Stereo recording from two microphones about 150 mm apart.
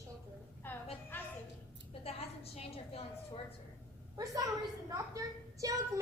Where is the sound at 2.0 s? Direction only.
40° left (ahead or behind).